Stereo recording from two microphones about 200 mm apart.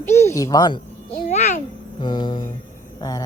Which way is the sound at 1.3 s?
35° left (ahead or behind).